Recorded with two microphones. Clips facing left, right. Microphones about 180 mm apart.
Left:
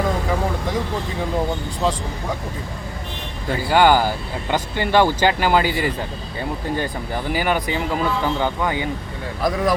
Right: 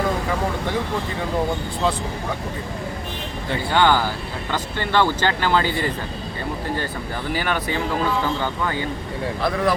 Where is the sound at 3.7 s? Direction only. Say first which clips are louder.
Left 4 dB; 10° left (ahead or behind).